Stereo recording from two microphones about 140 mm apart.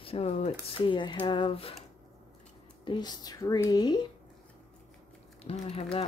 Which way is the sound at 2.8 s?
30° left (ahead or behind).